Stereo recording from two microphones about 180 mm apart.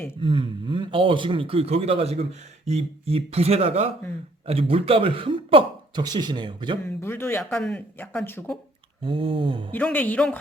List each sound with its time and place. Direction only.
0.2 s speech: 30° right (ahead or behind)
6.8 s speech: 15° left (ahead or behind)
9.0 s speech: 25° right (ahead or behind)
9.7 s speech: 10° left (ahead or behind)